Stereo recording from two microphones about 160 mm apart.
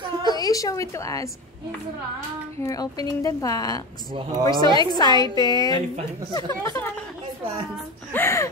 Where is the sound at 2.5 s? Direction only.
20° left (ahead or behind).